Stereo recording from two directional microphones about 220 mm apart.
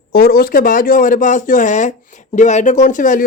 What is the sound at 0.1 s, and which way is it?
Speech, 45° left (ahead or behind).